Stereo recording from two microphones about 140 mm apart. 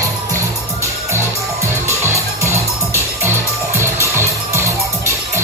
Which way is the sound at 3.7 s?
20° right (ahead or behind).